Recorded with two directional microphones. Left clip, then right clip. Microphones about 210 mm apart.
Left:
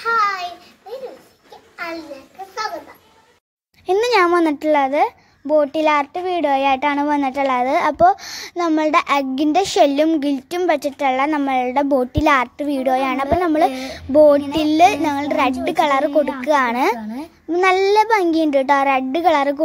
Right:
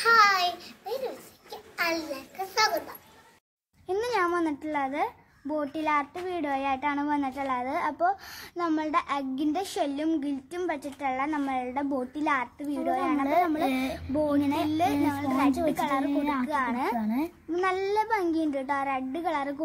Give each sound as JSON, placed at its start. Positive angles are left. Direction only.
{"t": 0.0, "sound": "a sound", "side_deg": -10}
{"t": 3.8, "sound": "a child's voice", "side_deg": 35}
{"t": 14.4, "sound": "a child's voice", "side_deg": 5}
{"t": 14.7, "sound": "a child's voice", "side_deg": 35}
{"t": 16.9, "sound": "a child's voice", "side_deg": 5}
{"t": 17.5, "sound": "a child's voice", "side_deg": 35}